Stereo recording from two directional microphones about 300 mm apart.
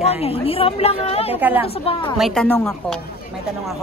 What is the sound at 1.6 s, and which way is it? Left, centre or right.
Speech, centre.